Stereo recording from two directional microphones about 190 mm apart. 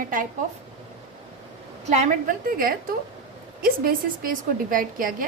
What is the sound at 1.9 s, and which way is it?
A woman's voice, 40° right (ahead or behind).